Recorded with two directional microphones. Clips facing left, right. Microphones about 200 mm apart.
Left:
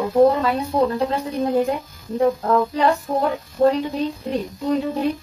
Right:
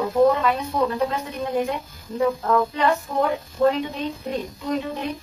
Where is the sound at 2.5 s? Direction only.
40° left (ahead or behind).